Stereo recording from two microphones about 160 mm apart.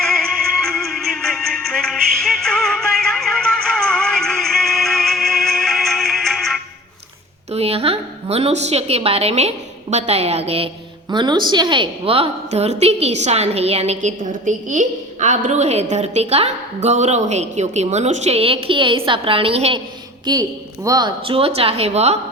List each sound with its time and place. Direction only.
0.0 s music: 5° left (ahead or behind)
7.5 s a sound: 40° right (ahead or behind)
9.9 s a woman's voice: 40° right (ahead or behind)
20.2 s speech: 25° right (ahead or behind)
21.2 s a woman's voice: 35° right (ahead or behind)